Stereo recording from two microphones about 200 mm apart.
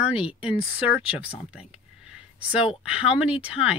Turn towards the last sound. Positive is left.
turn(degrees=-5)  # may be behind; listen again after turning